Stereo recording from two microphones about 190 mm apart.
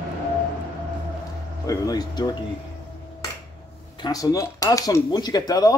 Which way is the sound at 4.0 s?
20° left (ahead or behind).